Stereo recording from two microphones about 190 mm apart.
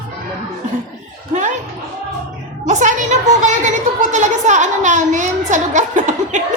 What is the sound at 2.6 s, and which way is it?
A woman's voice, 40° right (ahead or behind).